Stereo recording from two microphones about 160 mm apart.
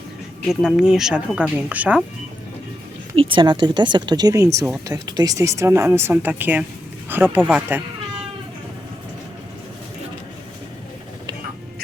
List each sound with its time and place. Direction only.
0.4 s speech: 5° right (ahead or behind)
3.2 s speech: 30° right (ahead or behind); by 7.8 s 10° right (ahead or behind)